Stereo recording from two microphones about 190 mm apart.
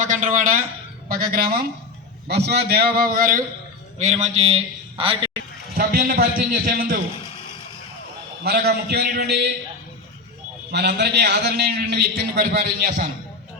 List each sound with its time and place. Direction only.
0.0 s a man's voice: 40° right (ahead or behind)
3.9 s a man's voice: 35° right (ahead or behind)
5.7 s a man's voice: 50° right (ahead or behind)
8.4 s a man's voice: 55° right (ahead or behind)
10.7 s a man's voice: 60° right (ahead or behind)